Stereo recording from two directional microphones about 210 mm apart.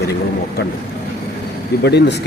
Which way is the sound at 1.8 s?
50° left (ahead or behind).